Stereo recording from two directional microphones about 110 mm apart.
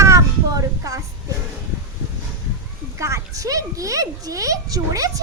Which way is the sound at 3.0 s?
30° right (ahead or behind).